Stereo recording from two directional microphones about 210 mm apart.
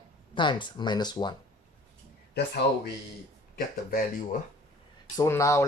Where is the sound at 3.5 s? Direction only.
45° left (ahead or behind).